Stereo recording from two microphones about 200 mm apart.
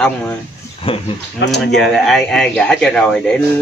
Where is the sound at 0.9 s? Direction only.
30° left (ahead or behind).